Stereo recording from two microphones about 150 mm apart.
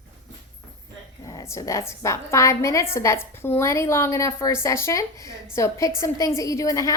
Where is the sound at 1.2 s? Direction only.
20° left (ahead or behind).